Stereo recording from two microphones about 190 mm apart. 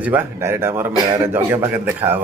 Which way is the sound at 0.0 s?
10° right (ahead or behind).